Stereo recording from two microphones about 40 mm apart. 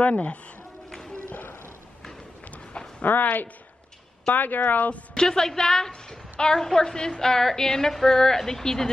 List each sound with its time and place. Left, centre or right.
0.0 s speech: left
1.3 s a sound: left
3.0 s a woman's voice: left
5.1 s a woman's voice: centre